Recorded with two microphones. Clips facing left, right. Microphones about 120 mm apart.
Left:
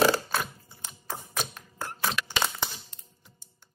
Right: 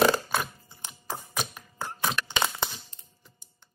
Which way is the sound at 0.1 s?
15° right (ahead or behind).